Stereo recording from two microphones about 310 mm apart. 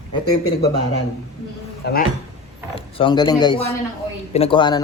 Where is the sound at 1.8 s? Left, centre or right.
Left.